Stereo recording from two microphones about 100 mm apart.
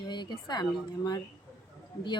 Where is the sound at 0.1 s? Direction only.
50° left (ahead or behind).